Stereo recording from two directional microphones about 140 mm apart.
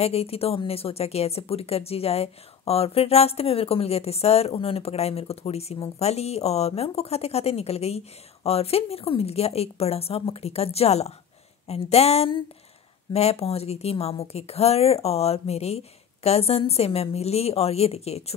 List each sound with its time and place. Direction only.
0.0 s speech: 45° left (ahead or behind)